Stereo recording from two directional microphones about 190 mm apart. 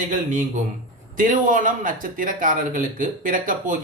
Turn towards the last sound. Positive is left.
turn(degrees=-45)  # may be behind; listen again after turning